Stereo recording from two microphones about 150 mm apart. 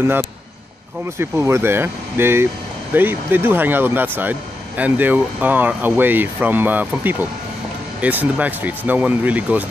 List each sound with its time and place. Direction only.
0.0 s speech: 15° right (ahead or behind)